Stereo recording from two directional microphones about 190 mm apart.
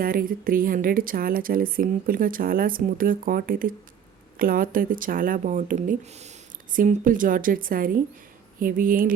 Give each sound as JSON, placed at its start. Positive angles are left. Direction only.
{"t": 0.0, "sound": "speech", "side_deg": -50}